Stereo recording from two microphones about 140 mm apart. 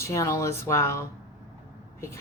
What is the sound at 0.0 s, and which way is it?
Speech, 20° left (ahead or behind).